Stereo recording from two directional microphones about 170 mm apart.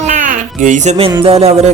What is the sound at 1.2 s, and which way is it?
Speech, 35° right (ahead or behind).